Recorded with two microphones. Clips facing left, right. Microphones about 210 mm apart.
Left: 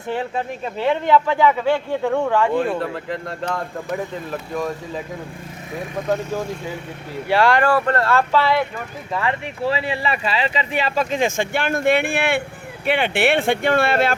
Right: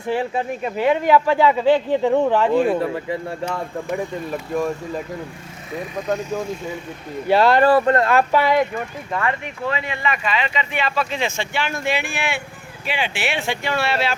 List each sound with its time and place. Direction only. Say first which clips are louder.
0.6 s speech: right 2 dB; 10° right (ahead or behind)
2.8 s speech: right 2 dB; 5° right (ahead or behind)
7.3 s speech: right 2 dB; 20° right (ahead or behind)
9.6 s speech: left 2 dB; 30° left (ahead or behind); by 14.2 s 50° left (ahead or behind)